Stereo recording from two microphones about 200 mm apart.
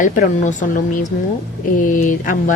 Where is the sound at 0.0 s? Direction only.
40° left (ahead or behind).